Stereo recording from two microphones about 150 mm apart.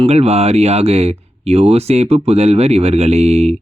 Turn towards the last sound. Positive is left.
turn(degrees=-45)  # may be behind; listen again after turning